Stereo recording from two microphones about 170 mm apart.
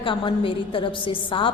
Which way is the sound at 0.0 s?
30° left (ahead or behind).